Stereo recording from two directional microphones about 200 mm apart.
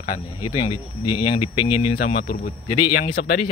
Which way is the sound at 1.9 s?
50° left (ahead or behind).